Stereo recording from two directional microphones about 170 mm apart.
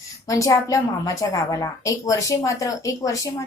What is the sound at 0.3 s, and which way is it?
A woman's voice, 20° left (ahead or behind).